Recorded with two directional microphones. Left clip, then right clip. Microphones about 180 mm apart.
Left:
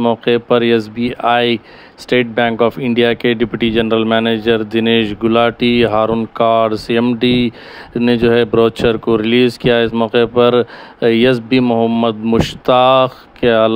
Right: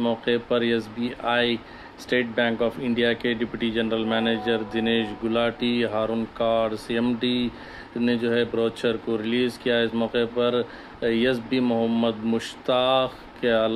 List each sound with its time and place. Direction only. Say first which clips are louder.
0.0 s speech: left 10 dB; 45° left (ahead or behind)